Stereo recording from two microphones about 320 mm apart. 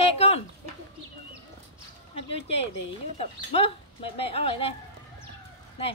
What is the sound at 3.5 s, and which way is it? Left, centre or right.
Speech, centre.